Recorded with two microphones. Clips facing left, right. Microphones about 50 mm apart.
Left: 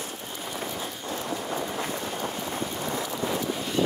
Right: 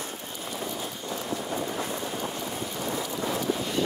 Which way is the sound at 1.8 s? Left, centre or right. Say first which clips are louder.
Left 1 dB; left.